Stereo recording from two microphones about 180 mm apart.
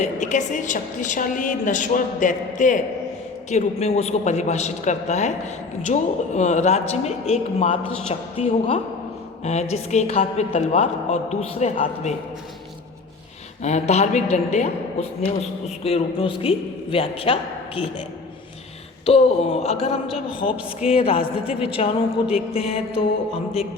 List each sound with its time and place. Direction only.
0.0 s a woman's voice: 45° left (ahead or behind)
13.6 s a woman's voice: 40° left (ahead or behind)
19.0 s a woman's voice: 35° left (ahead or behind)